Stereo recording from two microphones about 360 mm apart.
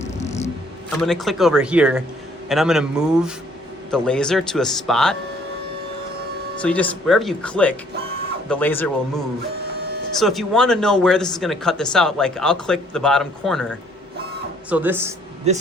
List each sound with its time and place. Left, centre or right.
0.0 s a sound: centre
1.0 s speech: centre
6.6 s speech: centre
15.5 s speech: centre